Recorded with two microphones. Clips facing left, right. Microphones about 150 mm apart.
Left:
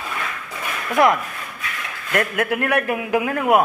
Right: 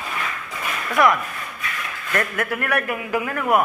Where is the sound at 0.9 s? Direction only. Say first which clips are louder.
Left 2 dB; 25° left (ahead or behind).